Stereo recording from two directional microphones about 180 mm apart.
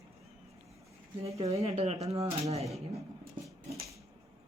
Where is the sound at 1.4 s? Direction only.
35° right (ahead or behind).